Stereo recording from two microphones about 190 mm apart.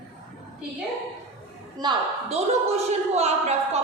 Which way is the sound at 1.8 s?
30° right (ahead or behind).